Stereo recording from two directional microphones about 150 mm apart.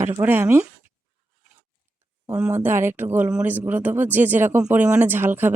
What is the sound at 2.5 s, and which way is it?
Speech, 15° right (ahead or behind).